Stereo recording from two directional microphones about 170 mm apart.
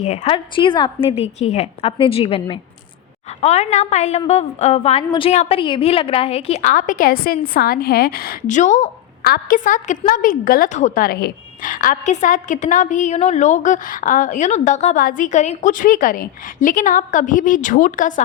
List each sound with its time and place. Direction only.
0.0 s a woman's voice: 35° left (ahead or behind)
9.2 s a woman's voice: 60° left (ahead or behind)